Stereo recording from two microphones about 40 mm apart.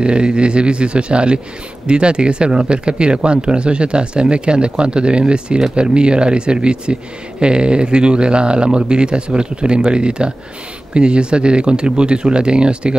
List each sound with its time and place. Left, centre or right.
0.0 s speech: right